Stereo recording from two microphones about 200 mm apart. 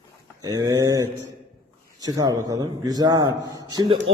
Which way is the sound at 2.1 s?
20° right (ahead or behind).